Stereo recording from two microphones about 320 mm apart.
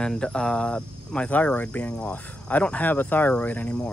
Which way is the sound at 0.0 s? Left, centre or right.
Centre.